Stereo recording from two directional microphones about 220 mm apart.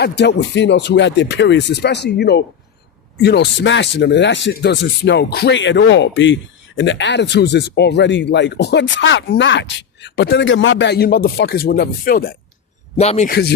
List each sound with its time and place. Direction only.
0.0 s speech: 50° left (ahead or behind)
13.0 s a man's voice: 30° left (ahead or behind)